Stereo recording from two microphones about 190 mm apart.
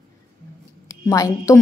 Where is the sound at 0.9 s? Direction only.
15° left (ahead or behind).